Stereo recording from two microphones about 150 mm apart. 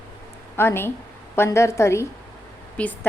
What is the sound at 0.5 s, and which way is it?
A woman's voice, 15° left (ahead or behind).